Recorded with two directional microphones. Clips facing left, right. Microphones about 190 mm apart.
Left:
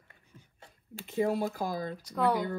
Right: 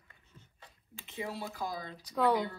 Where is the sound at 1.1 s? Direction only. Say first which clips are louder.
Left 11 dB; 50° left (ahead or behind).